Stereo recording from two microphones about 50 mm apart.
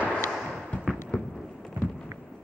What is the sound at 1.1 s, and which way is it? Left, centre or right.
Fireworks, left.